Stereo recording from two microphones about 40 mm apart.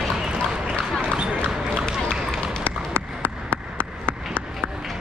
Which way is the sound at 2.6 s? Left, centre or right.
Left.